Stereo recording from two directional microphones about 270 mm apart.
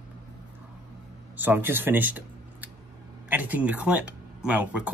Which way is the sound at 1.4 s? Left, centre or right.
Centre.